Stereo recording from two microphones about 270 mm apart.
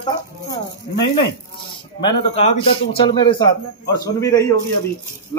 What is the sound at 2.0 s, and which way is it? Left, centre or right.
A man's voice, centre.